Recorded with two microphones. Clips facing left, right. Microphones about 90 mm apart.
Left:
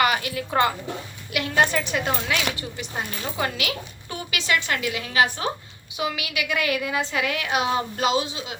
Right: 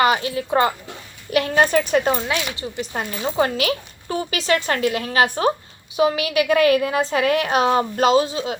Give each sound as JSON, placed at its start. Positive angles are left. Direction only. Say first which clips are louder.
{"t": 0.0, "sound": "a woman's voice", "louder": "right 4 dB", "side_deg": -30}
{"t": 1.3, "sound": "a woman's voice", "louder": "right 5 dB", "side_deg": -40}